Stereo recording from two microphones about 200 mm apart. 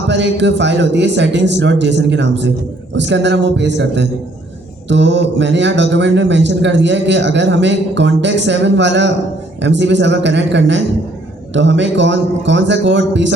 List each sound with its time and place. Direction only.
0.1 s a man's voice: 60° right (ahead or behind)